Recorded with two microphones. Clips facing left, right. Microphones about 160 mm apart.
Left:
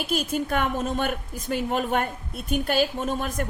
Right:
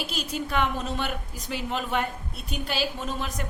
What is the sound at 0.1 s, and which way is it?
A woman's voice, 50° left (ahead or behind).